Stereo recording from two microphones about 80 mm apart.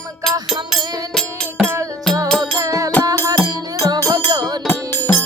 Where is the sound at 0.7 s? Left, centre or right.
Right.